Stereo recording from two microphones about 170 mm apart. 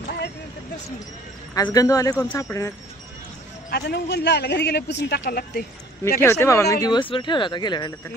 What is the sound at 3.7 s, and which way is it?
A man's voice, 75° left (ahead or behind).